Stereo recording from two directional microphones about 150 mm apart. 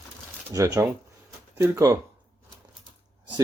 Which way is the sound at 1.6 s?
20° right (ahead or behind).